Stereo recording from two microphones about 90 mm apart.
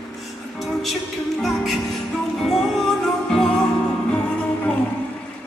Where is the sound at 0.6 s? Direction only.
Centre (ahead or behind).